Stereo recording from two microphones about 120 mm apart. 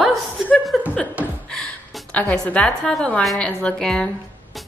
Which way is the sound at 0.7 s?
Centre (ahead or behind).